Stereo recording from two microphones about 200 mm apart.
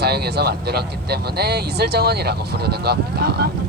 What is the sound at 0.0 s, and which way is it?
Speech, 55° right (ahead or behind).